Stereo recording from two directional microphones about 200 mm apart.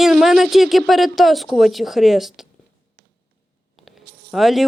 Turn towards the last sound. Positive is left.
turn(degrees=0)  # may be behind; listen again after turning